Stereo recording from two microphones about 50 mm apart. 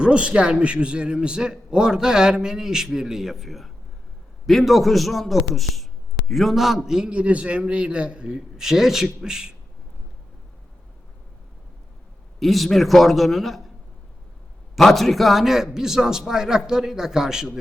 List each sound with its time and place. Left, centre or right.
0.0 s a man's voice: centre
7.1 s a man's voice: right
12.4 s a man's voice: centre
14.8 s a man's voice: centre